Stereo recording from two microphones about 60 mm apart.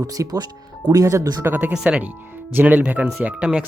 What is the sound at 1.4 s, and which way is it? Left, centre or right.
Speech, right.